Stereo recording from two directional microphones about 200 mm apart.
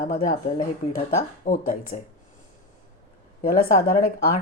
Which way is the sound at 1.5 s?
40° left (ahead or behind).